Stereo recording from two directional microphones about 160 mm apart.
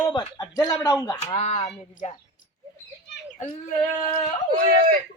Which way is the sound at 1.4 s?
40° left (ahead or behind).